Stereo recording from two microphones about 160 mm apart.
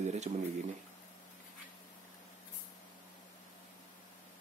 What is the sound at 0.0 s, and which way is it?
Speech, 45° right (ahead or behind).